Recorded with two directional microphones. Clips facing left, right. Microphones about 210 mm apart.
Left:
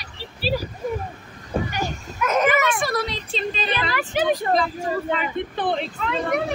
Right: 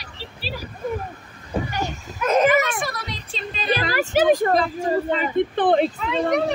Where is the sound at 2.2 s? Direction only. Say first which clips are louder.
Right 2 dB; 30° right (ahead or behind); by 4.5 s 45° right (ahead or behind).